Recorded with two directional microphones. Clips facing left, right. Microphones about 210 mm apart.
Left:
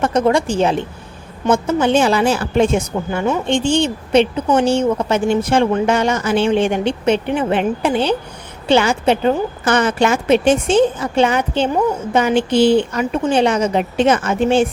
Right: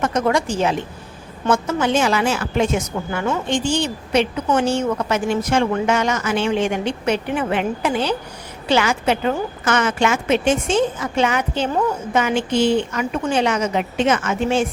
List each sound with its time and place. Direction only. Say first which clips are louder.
0.0 s a woman's voice: left 4 dB; 30° left (ahead or behind)